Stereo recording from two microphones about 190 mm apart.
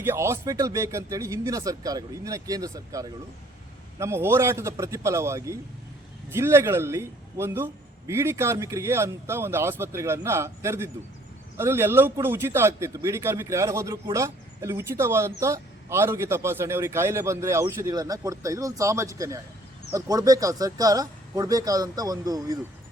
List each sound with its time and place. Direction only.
0.0 s a man's voice: 15° right (ahead or behind)